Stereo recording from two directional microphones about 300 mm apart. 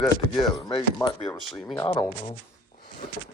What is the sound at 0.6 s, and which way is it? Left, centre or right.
Speech, centre.